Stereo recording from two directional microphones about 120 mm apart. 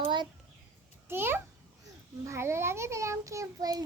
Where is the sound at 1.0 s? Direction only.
20° right (ahead or behind).